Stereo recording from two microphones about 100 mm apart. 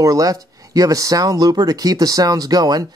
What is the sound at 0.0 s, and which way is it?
Speech, 35° right (ahead or behind).